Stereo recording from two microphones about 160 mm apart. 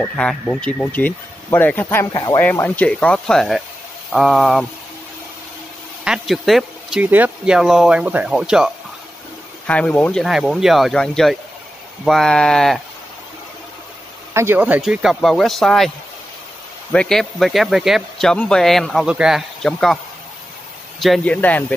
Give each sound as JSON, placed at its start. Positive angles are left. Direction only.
{"t": 0.0, "sound": "speech", "side_deg": 5}
{"t": 2.1, "sound": "speech", "side_deg": 25}
{"t": 2.4, "sound": "speech", "side_deg": 10}
{"t": 6.0, "sound": "speech", "side_deg": 0}
{"t": 9.7, "sound": "speech", "side_deg": 5}
{"t": 14.3, "sound": "speech", "side_deg": -15}
{"t": 16.9, "sound": "speech", "side_deg": 5}
{"t": 21.0, "sound": "speech", "side_deg": 5}